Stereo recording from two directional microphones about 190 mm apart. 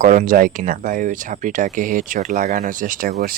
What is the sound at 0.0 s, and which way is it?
Speech, 45° right (ahead or behind).